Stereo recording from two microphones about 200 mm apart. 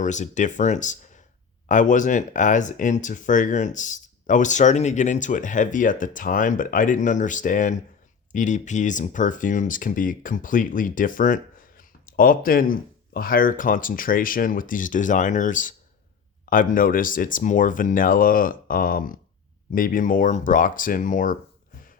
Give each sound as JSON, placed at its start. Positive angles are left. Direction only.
{"t": 0.0, "sound": "speech", "side_deg": 35}